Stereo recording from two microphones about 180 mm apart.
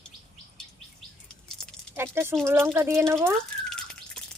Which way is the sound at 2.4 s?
15° right (ahead or behind).